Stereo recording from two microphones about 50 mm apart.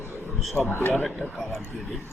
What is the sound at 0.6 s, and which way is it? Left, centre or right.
Speech, left.